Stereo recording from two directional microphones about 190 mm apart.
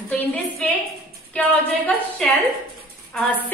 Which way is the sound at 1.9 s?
5° left (ahead or behind).